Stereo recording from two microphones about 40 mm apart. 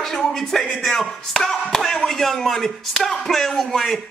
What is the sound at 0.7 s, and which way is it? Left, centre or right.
Speech, centre.